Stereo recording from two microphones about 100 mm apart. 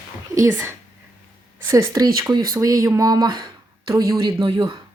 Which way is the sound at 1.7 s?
35° right (ahead or behind).